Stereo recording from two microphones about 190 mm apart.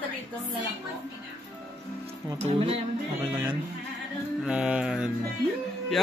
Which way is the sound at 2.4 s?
30° right (ahead or behind).